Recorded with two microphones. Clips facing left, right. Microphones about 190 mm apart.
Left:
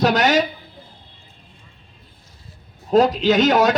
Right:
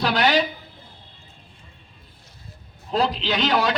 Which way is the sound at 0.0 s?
45° left (ahead or behind).